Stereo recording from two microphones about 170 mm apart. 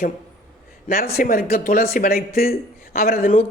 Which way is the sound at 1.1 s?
60° left (ahead or behind).